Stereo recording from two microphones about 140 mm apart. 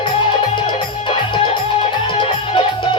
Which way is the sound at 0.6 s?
35° left (ahead or behind).